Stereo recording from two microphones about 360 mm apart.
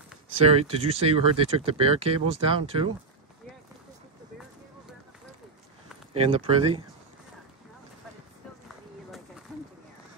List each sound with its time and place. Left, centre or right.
0.5 s speech: centre
6.1 s speech: centre